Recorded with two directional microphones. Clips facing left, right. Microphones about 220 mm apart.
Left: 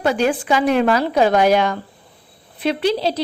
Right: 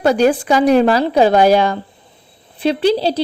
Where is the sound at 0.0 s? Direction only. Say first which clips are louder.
Right 5 dB; 40° right (ahead or behind).